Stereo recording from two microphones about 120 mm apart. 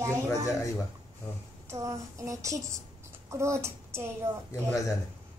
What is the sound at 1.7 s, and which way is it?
Child singing, 25° right (ahead or behind).